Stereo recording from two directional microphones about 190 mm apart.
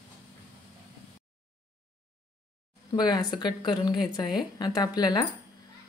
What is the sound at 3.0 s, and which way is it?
A woman's voice, 20° left (ahead or behind).